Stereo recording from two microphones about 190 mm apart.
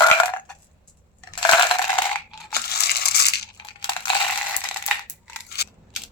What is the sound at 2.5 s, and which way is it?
Crushing, 55° left (ahead or behind).